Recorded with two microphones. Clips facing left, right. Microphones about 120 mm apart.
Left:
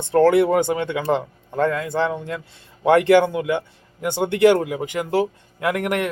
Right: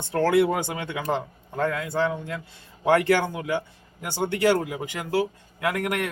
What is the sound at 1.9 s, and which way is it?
Speech, 25° left (ahead or behind).